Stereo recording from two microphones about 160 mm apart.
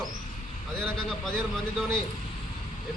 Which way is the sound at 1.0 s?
5° left (ahead or behind).